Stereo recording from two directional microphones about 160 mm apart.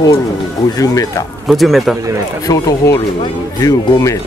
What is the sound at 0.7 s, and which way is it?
Speech, 20° left (ahead or behind).